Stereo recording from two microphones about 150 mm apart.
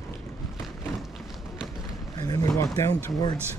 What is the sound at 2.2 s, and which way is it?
Speech, 25° left (ahead or behind).